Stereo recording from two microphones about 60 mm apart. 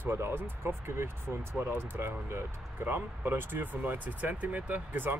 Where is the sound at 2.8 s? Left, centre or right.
Right.